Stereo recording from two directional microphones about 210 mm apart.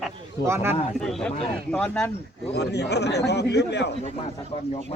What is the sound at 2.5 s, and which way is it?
A man's voice, 50° left (ahead or behind).